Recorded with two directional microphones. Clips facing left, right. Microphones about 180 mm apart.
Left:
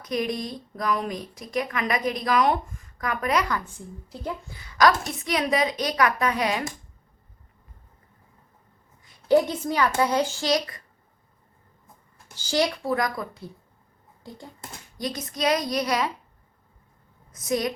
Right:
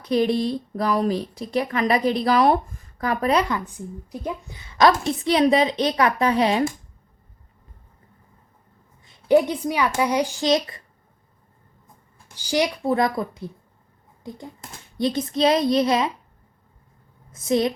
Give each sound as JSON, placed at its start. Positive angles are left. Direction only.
{"t": 0.0, "sound": "speech", "side_deg": -30}
{"t": 3.7, "sound": "a woman's voice", "side_deg": -15}
{"t": 9.0, "sound": "a child's voice", "side_deg": -20}
{"t": 12.3, "sound": "a woman's voice", "side_deg": -15}
{"t": 17.3, "sound": "a woman's voice", "side_deg": -25}